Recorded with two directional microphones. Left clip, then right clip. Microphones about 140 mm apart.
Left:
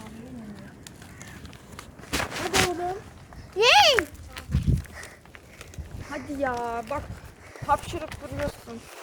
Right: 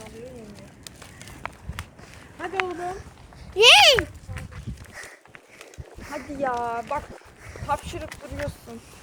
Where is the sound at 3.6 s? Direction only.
35° right (ahead or behind).